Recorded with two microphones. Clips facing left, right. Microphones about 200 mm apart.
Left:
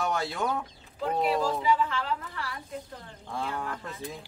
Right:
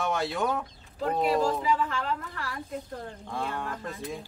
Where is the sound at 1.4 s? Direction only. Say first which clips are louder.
Even; 45° right (ahead or behind).